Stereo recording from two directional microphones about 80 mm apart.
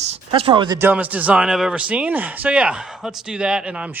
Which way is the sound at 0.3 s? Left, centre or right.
Right.